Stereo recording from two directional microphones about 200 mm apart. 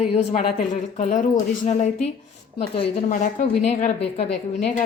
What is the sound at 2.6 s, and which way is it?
A woman's voice, 35° left (ahead or behind).